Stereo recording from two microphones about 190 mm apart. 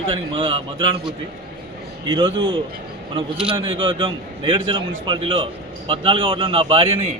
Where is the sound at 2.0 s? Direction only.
25° right (ahead or behind).